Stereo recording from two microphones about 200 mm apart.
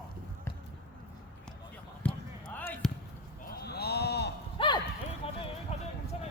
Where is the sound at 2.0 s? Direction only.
10° left (ahead or behind).